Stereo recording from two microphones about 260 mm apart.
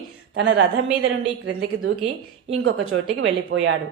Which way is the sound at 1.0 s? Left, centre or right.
Right.